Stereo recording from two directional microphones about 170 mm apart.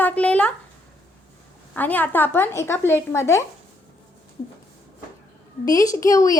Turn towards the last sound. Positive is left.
turn(degrees=20)  # may be behind; listen again after turning